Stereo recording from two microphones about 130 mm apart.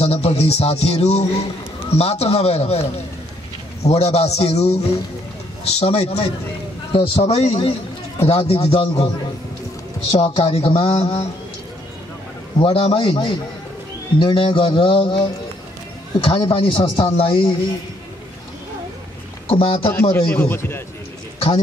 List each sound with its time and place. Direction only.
0.0 s a man's voice: 55° left (ahead or behind)
3.8 s a man's voice: 55° left (ahead or behind)
10.2 s speech: 45° left (ahead or behind)
12.5 s speech: 45° left (ahead or behind)
14.2 s music: 45° left (ahead or behind)
16.2 s speech: 45° left (ahead or behind)
19.4 s speech: 45° left (ahead or behind)
19.9 s a man's voice: 20° left (ahead or behind)